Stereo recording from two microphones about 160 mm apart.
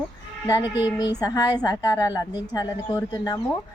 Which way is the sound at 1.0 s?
25° left (ahead or behind).